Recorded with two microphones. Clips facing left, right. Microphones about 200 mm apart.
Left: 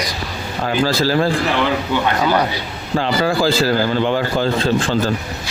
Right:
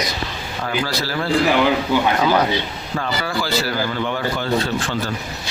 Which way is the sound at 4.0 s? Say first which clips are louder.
Left 5 dB; 35° left (ahead or behind).